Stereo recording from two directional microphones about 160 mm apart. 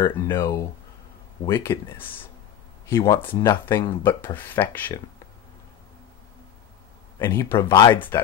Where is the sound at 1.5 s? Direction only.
15° left (ahead or behind).